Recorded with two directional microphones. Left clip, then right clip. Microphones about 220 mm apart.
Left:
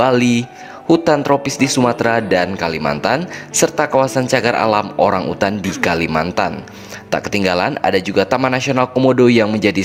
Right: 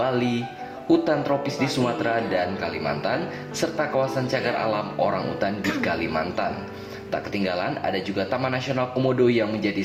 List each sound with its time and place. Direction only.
0.0 s a man's voice: 50° left (ahead or behind)